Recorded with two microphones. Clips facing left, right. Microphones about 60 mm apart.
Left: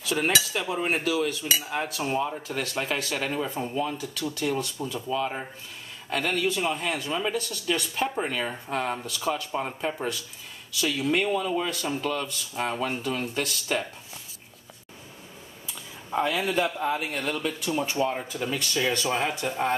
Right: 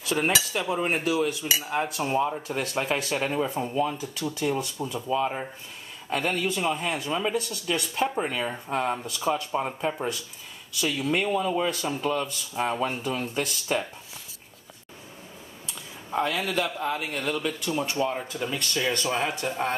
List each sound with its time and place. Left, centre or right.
0.5 s speech: centre; by 3.3 s right
3.5 s speech: centre
3.8 s speech: centre
4.4 s a man's voice: centre
6.3 s speech: centre
16.3 s a man's voice: centre